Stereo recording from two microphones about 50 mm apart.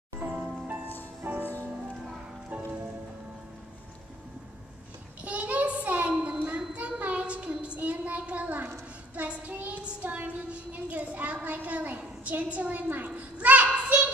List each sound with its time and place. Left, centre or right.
0.2 s music: right
1.2 s music: right
1.7 s music: centre
5.2 s a sound: right
7.0 s child singing: right
9.1 s a sound: right